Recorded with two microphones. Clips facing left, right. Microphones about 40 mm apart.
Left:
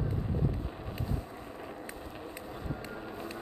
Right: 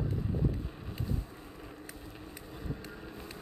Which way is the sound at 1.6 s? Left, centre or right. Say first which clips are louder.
Left 5 dB; centre.